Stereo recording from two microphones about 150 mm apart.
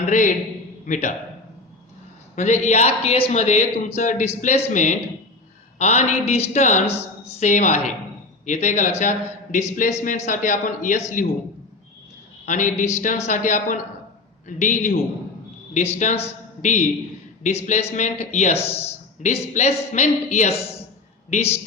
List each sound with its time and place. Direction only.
0.0 s a man's voice: 60° left (ahead or behind)
2.3 s a man's voice: 50° left (ahead or behind)
12.5 s a man's voice: 55° left (ahead or behind)